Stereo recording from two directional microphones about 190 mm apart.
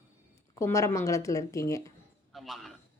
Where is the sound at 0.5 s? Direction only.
15° left (ahead or behind).